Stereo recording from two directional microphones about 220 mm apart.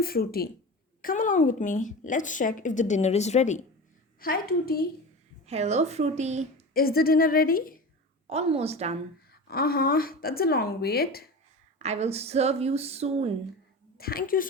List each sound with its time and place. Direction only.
0.0 s speech: 45° left (ahead or behind)
4.2 s speech: 40° left (ahead or behind)
5.5 s a woman's voice: 30° right (ahead or behind)
6.7 s speech: 40° left (ahead or behind)
8.3 s speech: 30° right (ahead or behind)
9.5 s speech: 45° left (ahead or behind)
11.8 s speech: 30° right (ahead or behind)
14.0 s speech: 40° left (ahead or behind)